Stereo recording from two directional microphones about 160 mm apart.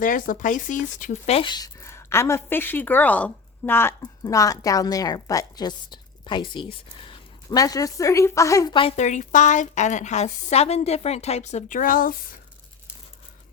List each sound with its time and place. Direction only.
0.0 s a woman's voice: 55° left (ahead or behind)
1.4 s a woman's voice: 25° left (ahead or behind)
7.0 s a sound: 30° left (ahead or behind)
7.6 s a woman's voice: 20° left (ahead or behind)
9.0 s a woman's voice: 50° left (ahead or behind)